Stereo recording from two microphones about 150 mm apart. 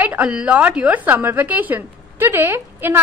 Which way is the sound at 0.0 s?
10° right (ahead or behind).